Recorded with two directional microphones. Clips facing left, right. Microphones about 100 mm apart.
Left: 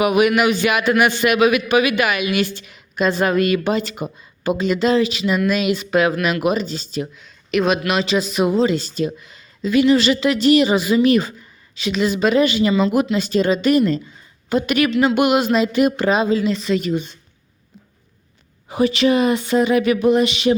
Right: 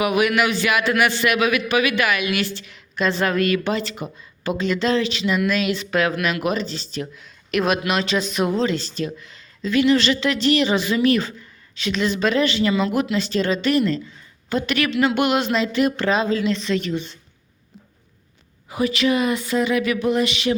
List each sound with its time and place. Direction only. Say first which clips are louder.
0.0 s a man's voice: left 4 dB; 20° left (ahead or behind)
7.2 s a man's voice: left 3 dB; centre (ahead or behind)
18.7 s speech: left 4 dB; 25° left (ahead or behind)